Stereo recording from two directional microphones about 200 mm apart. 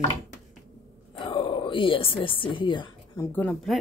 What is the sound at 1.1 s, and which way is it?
A woman's voice, 25° left (ahead or behind).